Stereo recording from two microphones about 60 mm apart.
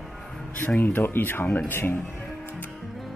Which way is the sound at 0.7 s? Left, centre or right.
Left.